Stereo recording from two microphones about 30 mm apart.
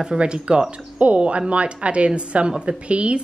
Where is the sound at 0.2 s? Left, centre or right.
Right.